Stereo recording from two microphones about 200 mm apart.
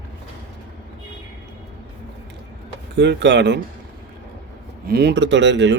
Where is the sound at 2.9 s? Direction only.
60° right (ahead or behind).